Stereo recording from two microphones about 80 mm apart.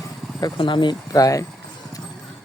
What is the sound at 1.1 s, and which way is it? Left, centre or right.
Speech, left.